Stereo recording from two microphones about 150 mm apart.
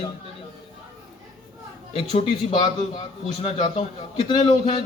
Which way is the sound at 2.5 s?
30° left (ahead or behind).